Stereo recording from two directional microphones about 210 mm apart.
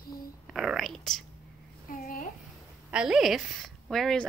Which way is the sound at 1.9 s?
40° left (ahead or behind).